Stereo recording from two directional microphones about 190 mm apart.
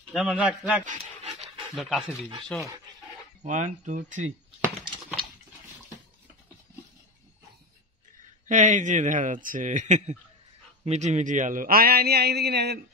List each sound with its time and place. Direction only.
0.1 s a man's voice: 5° right (ahead or behind)
0.8 s dog: 35° right (ahead or behind)
1.8 s a man's voice: centre (ahead or behind)
3.4 s a man's voice: 40° right (ahead or behind)
8.5 s a man's voice: 40° right (ahead or behind); by 12.8 s 60° right (ahead or behind)